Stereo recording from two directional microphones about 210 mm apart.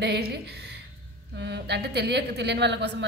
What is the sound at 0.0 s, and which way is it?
A woman's voice, 50° right (ahead or behind).